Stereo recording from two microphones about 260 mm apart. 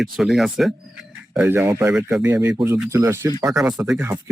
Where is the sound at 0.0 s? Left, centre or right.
Centre.